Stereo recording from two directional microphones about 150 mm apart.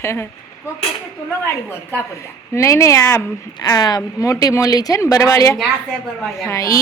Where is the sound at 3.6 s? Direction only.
25° left (ahead or behind).